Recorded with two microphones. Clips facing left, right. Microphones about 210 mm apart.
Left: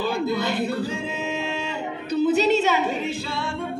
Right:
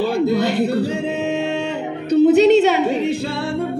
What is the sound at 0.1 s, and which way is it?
Music, 65° right (ahead or behind).